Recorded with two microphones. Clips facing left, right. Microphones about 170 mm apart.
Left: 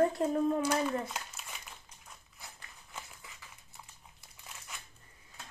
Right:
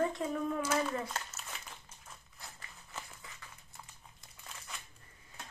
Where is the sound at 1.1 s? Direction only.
10° left (ahead or behind).